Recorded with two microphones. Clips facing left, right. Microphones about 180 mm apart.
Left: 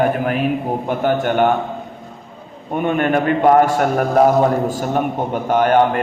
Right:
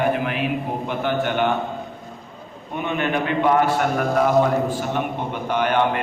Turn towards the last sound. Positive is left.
turn(degrees=45)  # may be behind; listen again after turning